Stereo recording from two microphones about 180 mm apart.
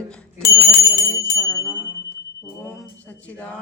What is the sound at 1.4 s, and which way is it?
Bell, 15° left (ahead or behind).